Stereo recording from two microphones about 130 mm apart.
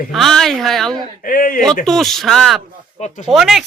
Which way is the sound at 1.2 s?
90° left.